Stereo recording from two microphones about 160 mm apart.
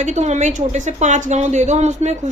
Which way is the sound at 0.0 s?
45° right (ahead or behind).